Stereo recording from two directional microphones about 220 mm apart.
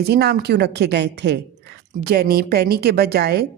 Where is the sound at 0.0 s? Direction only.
45° right (ahead or behind).